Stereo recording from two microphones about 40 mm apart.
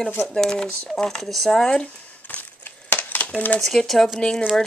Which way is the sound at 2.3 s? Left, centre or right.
Left.